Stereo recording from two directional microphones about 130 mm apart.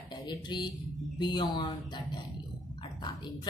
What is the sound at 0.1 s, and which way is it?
A woman's voice, 35° left (ahead or behind).